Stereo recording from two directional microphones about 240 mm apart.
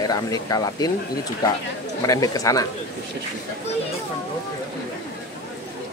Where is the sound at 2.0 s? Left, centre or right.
Centre.